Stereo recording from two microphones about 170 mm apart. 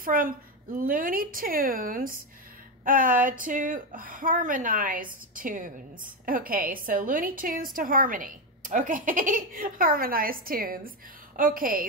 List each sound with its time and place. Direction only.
0.0 s a woman's voice: 55° right (ahead or behind)